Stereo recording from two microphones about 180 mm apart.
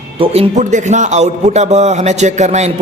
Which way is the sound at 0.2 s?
40° right (ahead or behind).